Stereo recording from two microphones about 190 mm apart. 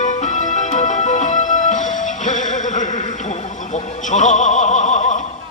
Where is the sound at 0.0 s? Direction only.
40° left (ahead or behind).